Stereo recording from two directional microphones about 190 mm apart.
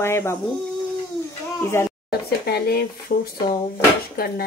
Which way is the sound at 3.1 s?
45° left (ahead or behind).